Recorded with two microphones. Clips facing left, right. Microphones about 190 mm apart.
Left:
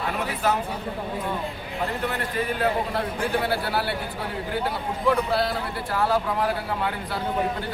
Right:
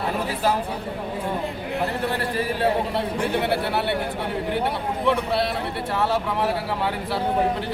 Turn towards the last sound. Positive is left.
turn(degrees=-25)  # may be behind; listen again after turning